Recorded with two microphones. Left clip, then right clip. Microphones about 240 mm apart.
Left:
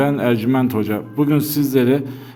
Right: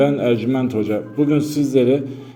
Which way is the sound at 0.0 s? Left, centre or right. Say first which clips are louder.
Right 1 dB; left.